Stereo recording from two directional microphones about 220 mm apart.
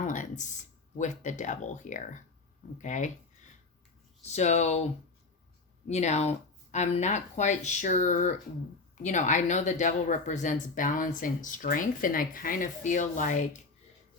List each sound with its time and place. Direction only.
0.0 s speech: 35° left (ahead or behind)
4.3 s speech: 30° left (ahead or behind)
5.9 s speech: 30° left (ahead or behind)